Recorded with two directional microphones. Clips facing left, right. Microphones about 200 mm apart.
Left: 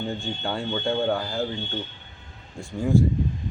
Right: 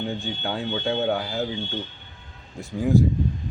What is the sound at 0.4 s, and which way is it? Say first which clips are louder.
Speech: even; 5° right (ahead or behind).